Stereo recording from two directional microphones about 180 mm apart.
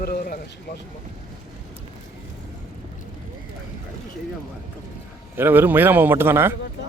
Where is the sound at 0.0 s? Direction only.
55° left (ahead or behind).